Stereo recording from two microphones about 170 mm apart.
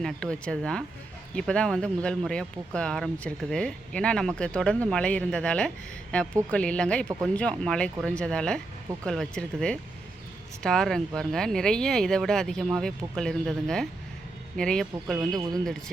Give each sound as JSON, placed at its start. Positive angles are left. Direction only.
{"t": 0.0, "sound": "speech", "side_deg": 5}
{"t": 15.4, "sound": "a man's voice", "side_deg": -20}